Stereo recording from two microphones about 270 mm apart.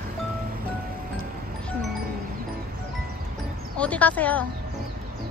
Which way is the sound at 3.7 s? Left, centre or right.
Centre.